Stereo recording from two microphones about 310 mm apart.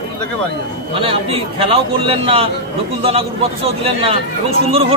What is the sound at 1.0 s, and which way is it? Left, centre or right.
A man's voice, centre.